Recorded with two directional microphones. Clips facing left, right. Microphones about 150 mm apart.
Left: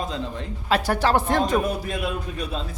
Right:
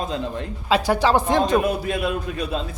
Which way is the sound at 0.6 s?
15° right (ahead or behind).